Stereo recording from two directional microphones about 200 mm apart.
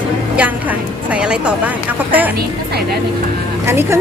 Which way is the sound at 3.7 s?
10° right (ahead or behind).